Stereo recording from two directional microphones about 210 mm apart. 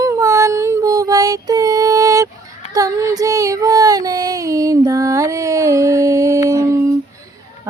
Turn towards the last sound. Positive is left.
turn(degrees=-15)  # may be behind; listen again after turning